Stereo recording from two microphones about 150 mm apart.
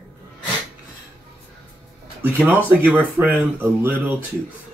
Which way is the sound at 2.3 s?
10° right (ahead or behind).